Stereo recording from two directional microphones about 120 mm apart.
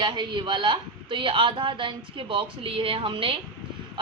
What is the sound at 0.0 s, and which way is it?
A woman's voice, 40° right (ahead or behind).